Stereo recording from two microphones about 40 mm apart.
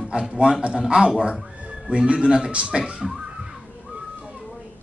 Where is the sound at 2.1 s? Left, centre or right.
Centre.